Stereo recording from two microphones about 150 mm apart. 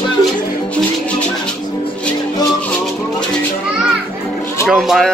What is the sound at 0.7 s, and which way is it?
Music, 5° left (ahead or behind).